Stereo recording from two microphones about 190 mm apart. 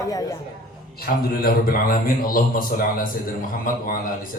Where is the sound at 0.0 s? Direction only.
20° left (ahead or behind).